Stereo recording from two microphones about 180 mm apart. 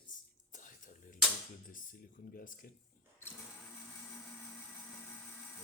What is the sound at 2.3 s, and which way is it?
Speech, 50° left (ahead or behind).